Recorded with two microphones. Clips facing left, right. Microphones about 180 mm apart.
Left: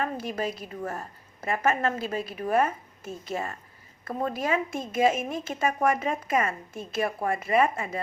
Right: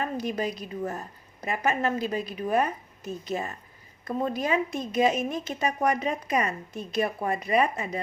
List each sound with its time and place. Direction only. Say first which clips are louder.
0.0 s a woman's voice: right 1 dB; 20° right (ahead or behind)